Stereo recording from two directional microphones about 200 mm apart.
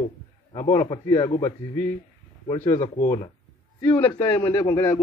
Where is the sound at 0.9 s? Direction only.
15° left (ahead or behind).